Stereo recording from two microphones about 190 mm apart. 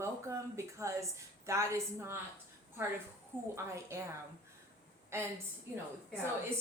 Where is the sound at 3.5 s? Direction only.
15° right (ahead or behind).